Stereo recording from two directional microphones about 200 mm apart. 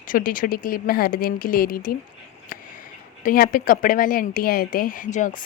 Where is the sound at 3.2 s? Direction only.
45° left (ahead or behind).